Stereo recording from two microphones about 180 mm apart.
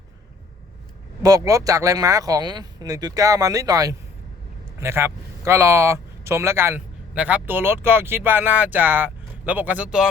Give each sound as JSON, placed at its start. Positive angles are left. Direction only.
{"t": 1.2, "sound": "speech", "side_deg": -20}